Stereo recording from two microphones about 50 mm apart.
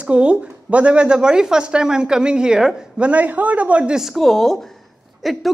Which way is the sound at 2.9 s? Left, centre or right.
Right.